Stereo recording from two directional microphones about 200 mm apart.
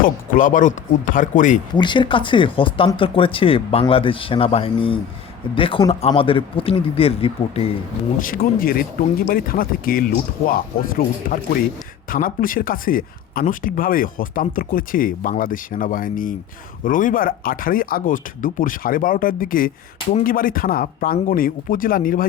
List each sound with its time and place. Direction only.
0.0 s speech: 40° left (ahead or behind)
1.7 s speech: 20° left (ahead or behind)
8.2 s speech: 45° left (ahead or behind)